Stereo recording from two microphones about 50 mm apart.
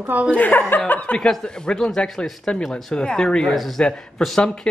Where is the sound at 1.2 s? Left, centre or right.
Centre.